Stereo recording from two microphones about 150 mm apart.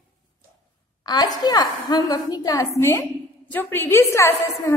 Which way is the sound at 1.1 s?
25° left (ahead or behind).